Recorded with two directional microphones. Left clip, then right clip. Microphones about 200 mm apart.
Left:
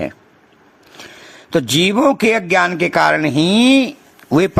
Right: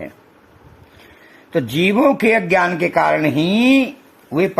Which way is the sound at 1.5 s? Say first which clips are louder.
Left 2 dB; 25° left (ahead or behind).